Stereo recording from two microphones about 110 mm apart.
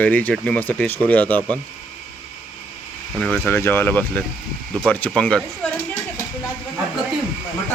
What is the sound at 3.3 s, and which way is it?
Speech, 20° left (ahead or behind).